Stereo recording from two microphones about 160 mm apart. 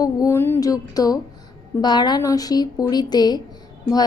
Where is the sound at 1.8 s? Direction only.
25° left (ahead or behind).